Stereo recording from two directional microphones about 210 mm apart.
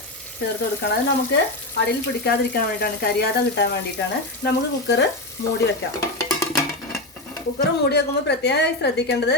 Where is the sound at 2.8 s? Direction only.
50° left (ahead or behind).